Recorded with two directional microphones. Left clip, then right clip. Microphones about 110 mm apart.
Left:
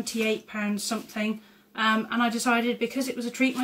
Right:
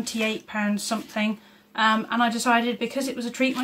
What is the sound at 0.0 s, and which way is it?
A woman's voice, 15° right (ahead or behind).